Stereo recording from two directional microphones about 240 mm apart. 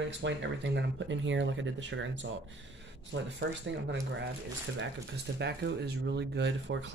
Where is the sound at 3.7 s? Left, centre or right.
Right.